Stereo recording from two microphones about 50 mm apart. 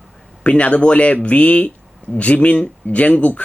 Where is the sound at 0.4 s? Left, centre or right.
Left.